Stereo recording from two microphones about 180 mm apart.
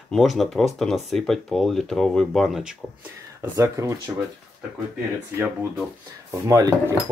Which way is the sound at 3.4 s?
15° right (ahead or behind).